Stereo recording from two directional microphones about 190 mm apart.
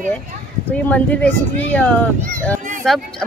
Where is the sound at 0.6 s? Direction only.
5° left (ahead or behind).